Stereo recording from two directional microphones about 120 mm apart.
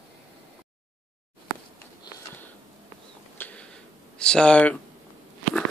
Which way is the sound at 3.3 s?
15° left (ahead or behind).